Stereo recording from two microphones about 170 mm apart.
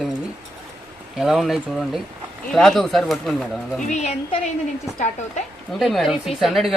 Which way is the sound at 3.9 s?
40° left (ahead or behind).